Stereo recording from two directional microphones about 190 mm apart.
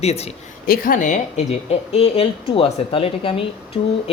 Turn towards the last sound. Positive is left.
turn(degrees=30)  # may be behind; listen again after turning